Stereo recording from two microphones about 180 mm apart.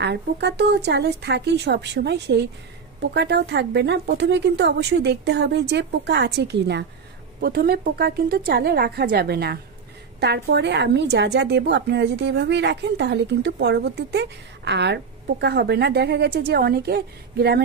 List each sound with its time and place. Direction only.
0.0 s speech: 70° right (ahead or behind)
7.3 s a woman's voice: 60° right (ahead or behind)